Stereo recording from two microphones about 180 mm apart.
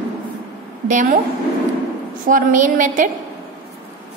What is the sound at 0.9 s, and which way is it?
Speech, 45° right (ahead or behind).